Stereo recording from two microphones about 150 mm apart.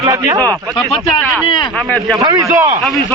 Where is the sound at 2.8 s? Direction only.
Centre (ahead or behind).